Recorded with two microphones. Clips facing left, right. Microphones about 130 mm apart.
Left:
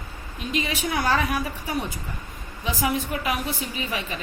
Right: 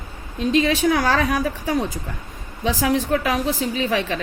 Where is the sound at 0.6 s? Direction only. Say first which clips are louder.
Right 8 dB; 90° right.